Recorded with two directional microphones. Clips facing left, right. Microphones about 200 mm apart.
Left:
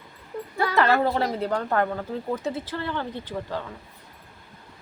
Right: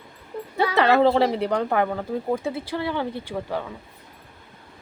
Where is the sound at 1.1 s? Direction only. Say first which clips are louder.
Right 5 dB; 25° right (ahead or behind).